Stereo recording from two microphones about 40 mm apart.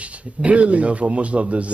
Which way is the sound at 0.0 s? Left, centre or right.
Right.